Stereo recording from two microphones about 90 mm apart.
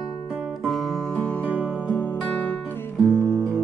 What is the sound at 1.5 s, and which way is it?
Music, 15° right (ahead or behind).